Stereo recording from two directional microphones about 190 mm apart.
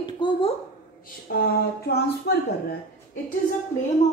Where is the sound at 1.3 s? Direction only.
55° left (ahead or behind).